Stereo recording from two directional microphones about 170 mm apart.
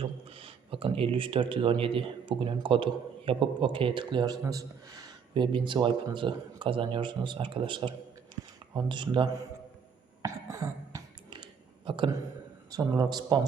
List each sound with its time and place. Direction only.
0.0 s speech: 35° right (ahead or behind)
10.2 s cough: 20° right (ahead or behind)
11.9 s speech: 30° right (ahead or behind)